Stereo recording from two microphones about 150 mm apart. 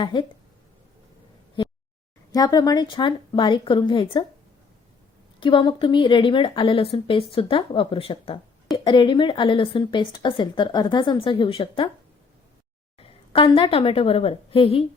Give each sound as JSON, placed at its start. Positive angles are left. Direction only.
{"t": 0.0, "sound": "a woman's voice", "side_deg": 30}
{"t": 2.3, "sound": "a woman's voice", "side_deg": 25}
{"t": 5.4, "sound": "a woman's voice", "side_deg": 35}
{"t": 13.0, "sound": "a woman's voice", "side_deg": 35}